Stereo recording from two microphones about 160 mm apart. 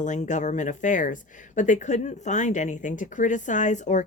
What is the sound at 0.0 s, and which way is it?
Speech, 50° left (ahead or behind).